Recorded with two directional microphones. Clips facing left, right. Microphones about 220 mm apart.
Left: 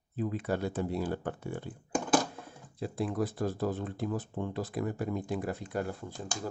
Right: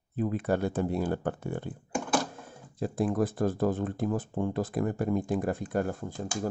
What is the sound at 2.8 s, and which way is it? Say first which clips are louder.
Speech: right 5 dB; 50° right (ahead or behind).